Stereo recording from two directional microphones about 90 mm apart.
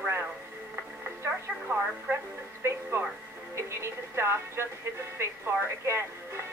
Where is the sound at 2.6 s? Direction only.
30° right (ahead or behind).